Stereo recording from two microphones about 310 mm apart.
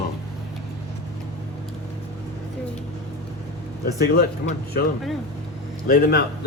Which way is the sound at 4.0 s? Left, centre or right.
Left.